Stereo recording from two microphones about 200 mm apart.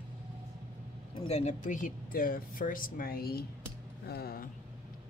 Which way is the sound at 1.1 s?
30° left (ahead or behind).